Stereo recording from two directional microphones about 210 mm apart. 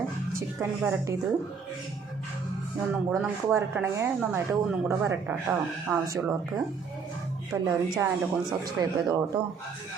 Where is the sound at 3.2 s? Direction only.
10° right (ahead or behind).